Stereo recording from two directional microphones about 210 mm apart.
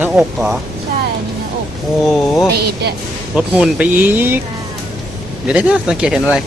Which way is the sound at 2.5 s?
50° right (ahead or behind).